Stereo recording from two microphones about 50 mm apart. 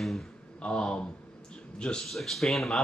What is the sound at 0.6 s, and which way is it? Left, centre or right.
Speech, centre.